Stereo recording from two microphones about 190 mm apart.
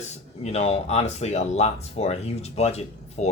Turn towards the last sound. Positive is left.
turn(degrees=35)  # may be behind; listen again after turning